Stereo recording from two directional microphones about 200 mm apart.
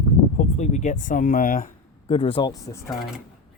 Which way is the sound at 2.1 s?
30° left (ahead or behind).